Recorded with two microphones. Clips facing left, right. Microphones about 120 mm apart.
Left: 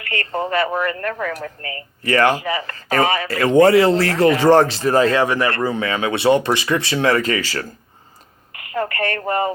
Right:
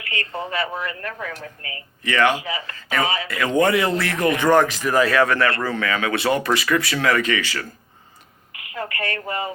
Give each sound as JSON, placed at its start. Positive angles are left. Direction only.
{"t": 0.0, "sound": "a sound", "side_deg": 55}
{"t": 0.3, "sound": "speech", "side_deg": 55}
{"t": 2.4, "sound": "speech", "side_deg": 50}
{"t": 3.2, "sound": "speech", "side_deg": 30}
{"t": 5.2, "sound": "a man's voice", "side_deg": 15}
{"t": 8.5, "sound": "a woman's voice", "side_deg": 50}